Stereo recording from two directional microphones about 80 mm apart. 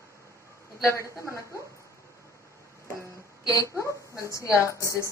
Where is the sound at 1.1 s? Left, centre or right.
Left.